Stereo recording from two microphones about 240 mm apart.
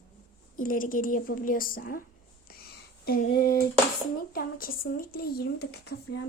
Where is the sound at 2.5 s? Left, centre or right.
Left.